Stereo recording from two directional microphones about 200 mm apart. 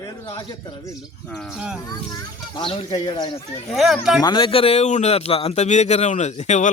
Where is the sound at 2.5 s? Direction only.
25° left (ahead or behind).